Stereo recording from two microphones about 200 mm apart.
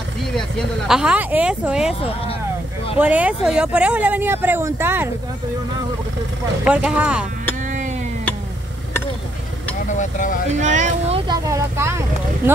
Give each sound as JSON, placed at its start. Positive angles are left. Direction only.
{"t": 0.4, "sound": "speech", "side_deg": -5}
{"t": 3.0, "sound": "speech", "side_deg": -5}
{"t": 6.6, "sound": "speech", "side_deg": -5}
{"t": 10.6, "sound": "speech", "side_deg": -35}
{"t": 11.4, "sound": "speech", "side_deg": -15}